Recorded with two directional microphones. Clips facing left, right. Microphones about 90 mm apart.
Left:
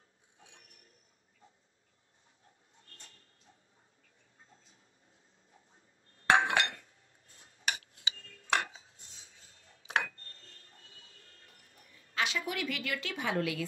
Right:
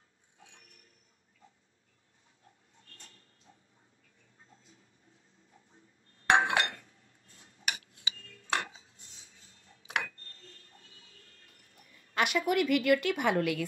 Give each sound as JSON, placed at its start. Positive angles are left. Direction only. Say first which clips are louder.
{"t": 6.3, "sound": "chink", "louder": "right 1 dB", "side_deg": -25}
{"t": 7.2, "sound": "tick-tock", "louder": "left 1 dB", "side_deg": 35}
{"t": 8.5, "sound": "dishes", "louder": "left 2 dB", "side_deg": -30}
{"t": 8.7, "sound": "dishes", "louder": "left 1 dB", "side_deg": 35}
{"t": 9.8, "sound": "a sound", "louder": "left 2 dB", "side_deg": 30}
{"t": 12.2, "sound": "a woman's voice", "louder": "right 6 dB", "side_deg": -55}